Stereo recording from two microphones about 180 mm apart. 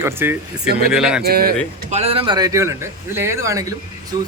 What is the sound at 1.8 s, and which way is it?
A man's voice, 35° right (ahead or behind).